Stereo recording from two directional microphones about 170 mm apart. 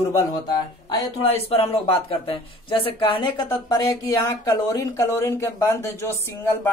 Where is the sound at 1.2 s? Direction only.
35° left (ahead or behind).